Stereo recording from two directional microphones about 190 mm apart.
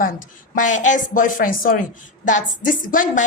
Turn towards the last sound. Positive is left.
turn(degrees=45)  # may be behind; listen again after turning